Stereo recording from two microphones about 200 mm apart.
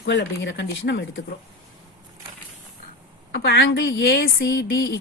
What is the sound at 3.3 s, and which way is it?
A woman's voice, 55° left (ahead or behind).